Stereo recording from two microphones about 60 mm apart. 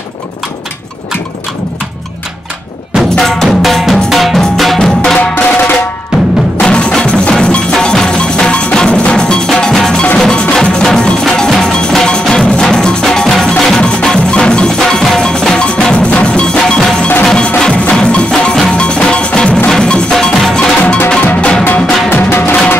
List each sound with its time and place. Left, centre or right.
3.2 s music: centre
5.3 s drum: left
6.1 s percussion: centre
6.6 s music: centre
17.2 s tubular bells: centre
17.6 s music: centre
21.4 s music: centre
22.1 s music: left